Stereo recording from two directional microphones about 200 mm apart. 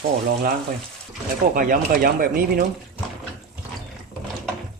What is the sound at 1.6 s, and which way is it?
Speech, 45° right (ahead or behind).